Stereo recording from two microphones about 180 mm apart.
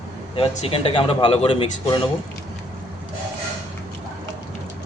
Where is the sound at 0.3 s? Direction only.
30° left (ahead or behind).